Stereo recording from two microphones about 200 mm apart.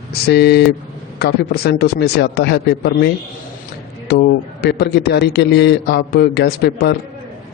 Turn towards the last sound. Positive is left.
turn(degrees=55)  # may be behind; listen again after turning